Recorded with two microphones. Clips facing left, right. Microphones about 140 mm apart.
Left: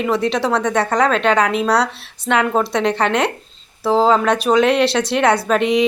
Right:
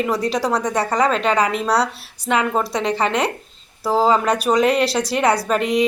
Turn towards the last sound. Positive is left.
turn(degrees=0)  # may be behind; listen again after turning